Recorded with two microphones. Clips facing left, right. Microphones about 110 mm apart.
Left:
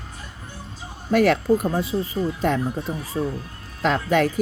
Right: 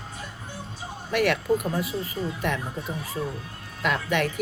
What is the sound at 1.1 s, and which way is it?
Speech, 35° left (ahead or behind).